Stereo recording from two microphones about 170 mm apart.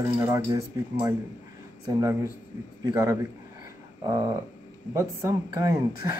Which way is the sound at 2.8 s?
20° right (ahead or behind).